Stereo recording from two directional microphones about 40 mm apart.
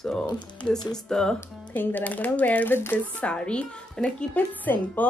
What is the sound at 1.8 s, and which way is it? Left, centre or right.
Speech, left.